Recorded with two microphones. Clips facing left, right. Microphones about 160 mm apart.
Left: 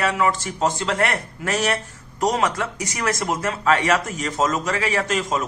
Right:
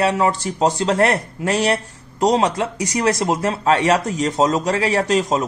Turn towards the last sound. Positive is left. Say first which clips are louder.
# right 5 dB
turn(degrees=-35)  # may be behind; listen again after turning